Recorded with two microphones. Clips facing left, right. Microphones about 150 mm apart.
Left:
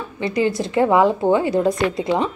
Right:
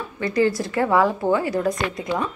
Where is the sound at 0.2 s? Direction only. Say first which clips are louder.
Even; 20° left (ahead or behind).